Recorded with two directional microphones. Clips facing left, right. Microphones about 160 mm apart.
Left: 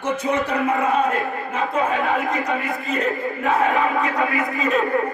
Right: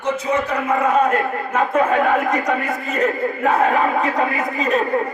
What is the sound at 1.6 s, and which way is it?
Speech, 50° right (ahead or behind).